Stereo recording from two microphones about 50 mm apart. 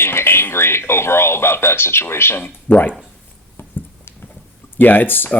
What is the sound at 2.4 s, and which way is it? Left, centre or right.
Speech, left.